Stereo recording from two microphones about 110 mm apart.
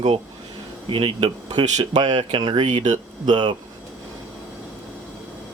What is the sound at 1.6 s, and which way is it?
Speech, 90° right.